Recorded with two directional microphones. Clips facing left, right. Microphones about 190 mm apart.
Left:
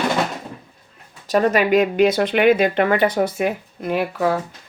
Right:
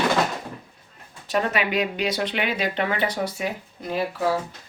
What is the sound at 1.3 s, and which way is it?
Speech, 40° left (ahead or behind).